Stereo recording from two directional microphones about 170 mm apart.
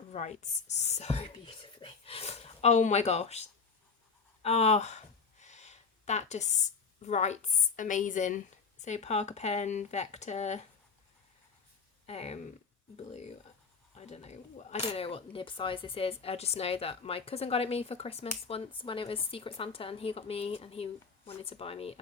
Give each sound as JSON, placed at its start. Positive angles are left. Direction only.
{"t": 0.1, "sound": "speech", "side_deg": 40}
{"t": 12.0, "sound": "speech", "side_deg": 40}
{"t": 13.9, "sound": "speech", "side_deg": 40}